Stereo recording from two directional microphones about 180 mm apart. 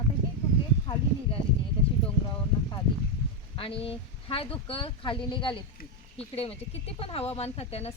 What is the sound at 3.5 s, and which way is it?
Speech, 30° left (ahead or behind).